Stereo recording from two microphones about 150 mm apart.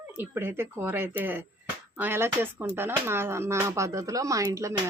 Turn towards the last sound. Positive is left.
turn(degrees=-20)  # may be behind; listen again after turning